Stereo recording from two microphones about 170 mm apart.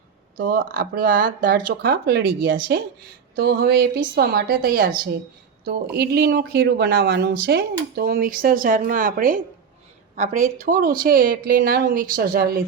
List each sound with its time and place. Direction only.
0.3 s speech: 55° right (ahead or behind)
3.3 s a sound: 65° right (ahead or behind)
4.1 s speech: 65° right (ahead or behind)
5.6 s speech: 70° right (ahead or behind)